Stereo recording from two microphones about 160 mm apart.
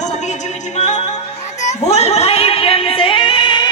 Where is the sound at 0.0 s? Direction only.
45° left (ahead or behind).